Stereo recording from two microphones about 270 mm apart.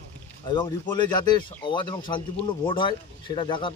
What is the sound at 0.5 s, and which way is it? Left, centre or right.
Speech, centre.